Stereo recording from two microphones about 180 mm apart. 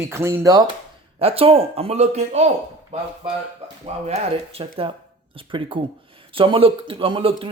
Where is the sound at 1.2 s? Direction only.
35° right (ahead or behind).